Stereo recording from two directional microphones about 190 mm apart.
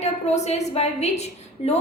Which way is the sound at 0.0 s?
35° left (ahead or behind).